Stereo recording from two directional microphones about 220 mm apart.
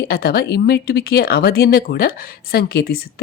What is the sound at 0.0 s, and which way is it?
Speech, 45° left (ahead or behind).